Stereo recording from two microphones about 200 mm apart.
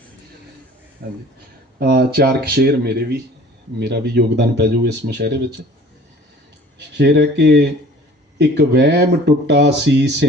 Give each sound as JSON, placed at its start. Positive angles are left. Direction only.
{"t": 1.0, "sound": "speech", "side_deg": -50}
{"t": 6.7, "sound": "speech", "side_deg": -55}